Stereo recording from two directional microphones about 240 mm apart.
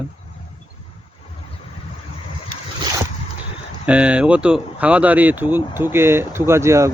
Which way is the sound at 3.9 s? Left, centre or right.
Centre.